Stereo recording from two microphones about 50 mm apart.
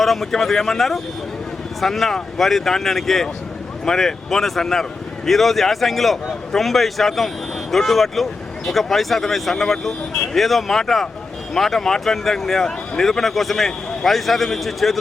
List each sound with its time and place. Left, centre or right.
0.0 s speech: centre